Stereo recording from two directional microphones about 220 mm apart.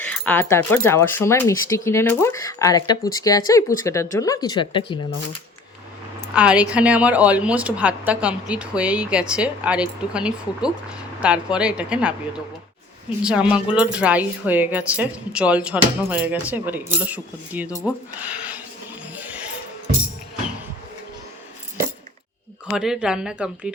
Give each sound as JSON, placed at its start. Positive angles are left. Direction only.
{"t": 0.1, "sound": "speech", "side_deg": 10}
{"t": 6.3, "sound": "a woman's voice", "side_deg": -5}
{"t": 13.2, "sound": "speech", "side_deg": -5}
{"t": 19.1, "sound": "a sound", "side_deg": -5}
{"t": 22.7, "sound": "a woman's voice", "side_deg": -5}